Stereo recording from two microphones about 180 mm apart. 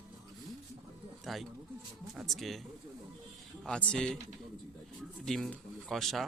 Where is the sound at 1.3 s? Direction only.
Centre (ahead or behind).